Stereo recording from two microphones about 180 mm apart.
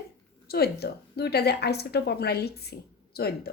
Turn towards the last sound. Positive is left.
turn(degrees=60)  # may be behind; listen again after turning